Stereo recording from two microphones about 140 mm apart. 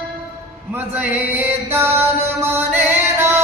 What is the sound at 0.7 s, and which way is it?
Music, 10° right (ahead or behind).